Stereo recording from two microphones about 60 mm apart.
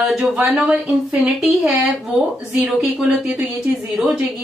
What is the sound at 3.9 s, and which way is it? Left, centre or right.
Speech, centre.